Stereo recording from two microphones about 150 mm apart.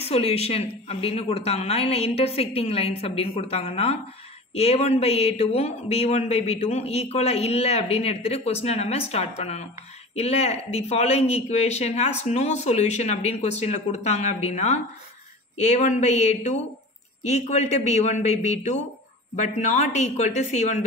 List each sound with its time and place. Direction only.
0.1 s a woman's voice: 40° left (ahead or behind)